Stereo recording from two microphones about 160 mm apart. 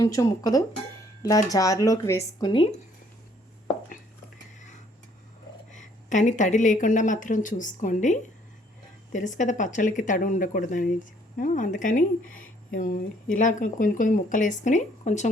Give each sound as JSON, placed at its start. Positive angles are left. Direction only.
{"t": 0.0, "sound": "speech", "side_deg": 20}
{"t": 5.7, "sound": "speech", "side_deg": 50}